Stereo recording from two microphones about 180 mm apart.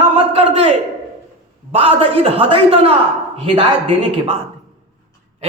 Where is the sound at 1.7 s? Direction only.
30° right (ahead or behind).